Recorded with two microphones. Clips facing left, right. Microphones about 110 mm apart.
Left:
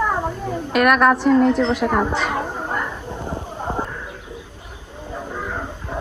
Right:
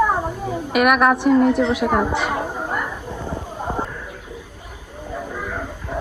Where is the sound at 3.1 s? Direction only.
15° left (ahead or behind).